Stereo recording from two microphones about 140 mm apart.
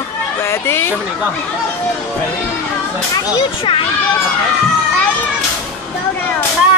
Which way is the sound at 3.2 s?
30° left (ahead or behind).